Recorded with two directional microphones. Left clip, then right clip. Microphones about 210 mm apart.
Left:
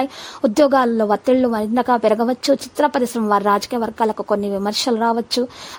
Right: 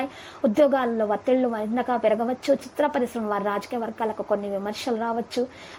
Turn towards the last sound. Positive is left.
turn(degrees=40)  # may be behind; listen again after turning